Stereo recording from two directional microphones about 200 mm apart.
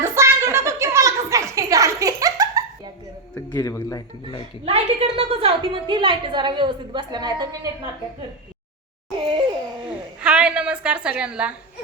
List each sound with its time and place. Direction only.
0.0 s a sound: 15° right (ahead or behind)
3.5 s speech: 15° left (ahead or behind)
4.6 s a woman's voice: 30° right (ahead or behind)
9.9 s a woman's voice: 5° right (ahead or behind)